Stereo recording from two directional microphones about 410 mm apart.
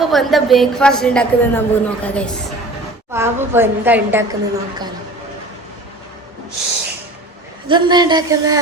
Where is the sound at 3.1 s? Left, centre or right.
Centre.